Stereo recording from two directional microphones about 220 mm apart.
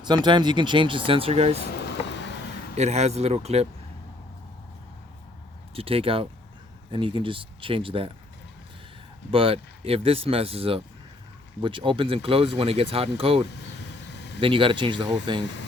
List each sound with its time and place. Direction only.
0.0 s speech: 20° right (ahead or behind)
2.0 s vehicle: 55° left (ahead or behind)
2.7 s speech: 30° right (ahead or behind)
5.7 s speech: 25° right (ahead or behind)
9.3 s speech: 25° right (ahead or behind)
14.1 s vehicle: 50° left (ahead or behind)
14.4 s speech: 25° right (ahead or behind)